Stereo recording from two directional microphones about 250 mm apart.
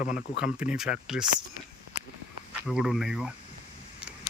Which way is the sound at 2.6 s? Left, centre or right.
Centre.